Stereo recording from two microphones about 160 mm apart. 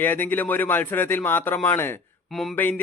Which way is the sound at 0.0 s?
10° left (ahead or behind).